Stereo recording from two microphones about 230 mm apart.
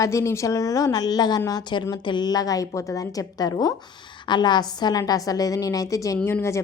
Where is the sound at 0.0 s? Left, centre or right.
Centre.